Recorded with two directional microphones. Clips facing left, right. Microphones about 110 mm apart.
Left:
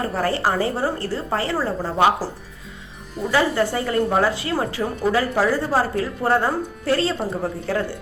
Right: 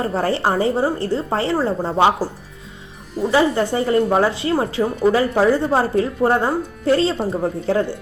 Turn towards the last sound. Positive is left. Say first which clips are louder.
# right 5 dB
turn(degrees=-25)  # may be behind; listen again after turning